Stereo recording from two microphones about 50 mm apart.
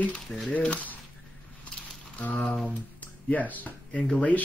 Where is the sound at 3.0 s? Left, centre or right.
Left.